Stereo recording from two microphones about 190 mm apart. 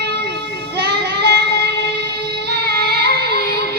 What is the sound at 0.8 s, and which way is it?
Child singing, 60° right (ahead or behind).